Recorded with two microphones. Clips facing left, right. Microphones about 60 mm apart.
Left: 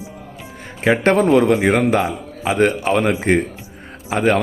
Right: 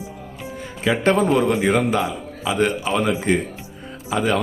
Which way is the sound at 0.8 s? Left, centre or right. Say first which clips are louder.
Left 3 dB; left.